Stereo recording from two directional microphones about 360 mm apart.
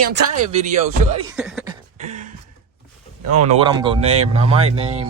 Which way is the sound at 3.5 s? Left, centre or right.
Centre.